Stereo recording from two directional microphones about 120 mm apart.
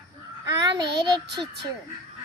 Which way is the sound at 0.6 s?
35° right (ahead or behind).